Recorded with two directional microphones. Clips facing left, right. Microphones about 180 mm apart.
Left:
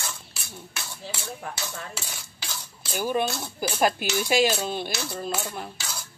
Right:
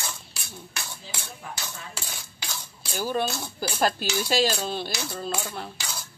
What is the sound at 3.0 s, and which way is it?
Speech, 15° left (ahead or behind).